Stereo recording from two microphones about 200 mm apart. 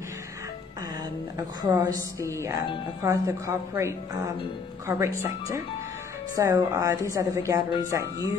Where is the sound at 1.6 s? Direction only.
20° right (ahead or behind).